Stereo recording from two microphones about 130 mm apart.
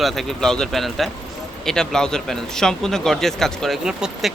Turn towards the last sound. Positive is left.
turn(degrees=-5)  # may be behind; listen again after turning